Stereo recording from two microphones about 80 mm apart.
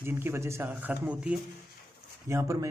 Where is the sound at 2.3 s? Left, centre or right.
Right.